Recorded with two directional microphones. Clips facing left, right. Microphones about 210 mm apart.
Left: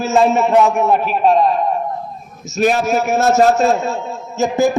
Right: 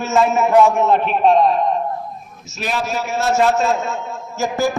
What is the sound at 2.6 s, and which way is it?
A man's voice, 45° left (ahead or behind).